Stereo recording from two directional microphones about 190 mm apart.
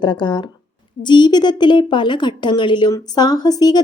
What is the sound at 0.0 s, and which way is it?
A woman's voice, 25° left (ahead or behind).